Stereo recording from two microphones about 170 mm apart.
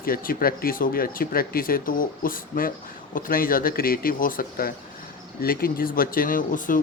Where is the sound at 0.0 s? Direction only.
55° left (ahead or behind).